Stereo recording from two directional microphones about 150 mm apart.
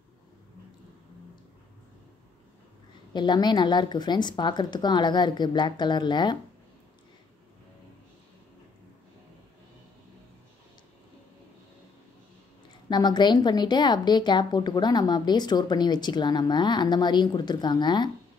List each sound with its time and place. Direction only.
3.1 s a woman's voice: 30° left (ahead or behind)
12.9 s a woman's voice: 30° left (ahead or behind)